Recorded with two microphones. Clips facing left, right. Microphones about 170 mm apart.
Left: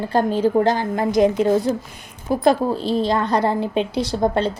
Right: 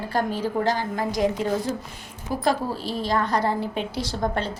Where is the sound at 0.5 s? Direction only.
35° left (ahead or behind).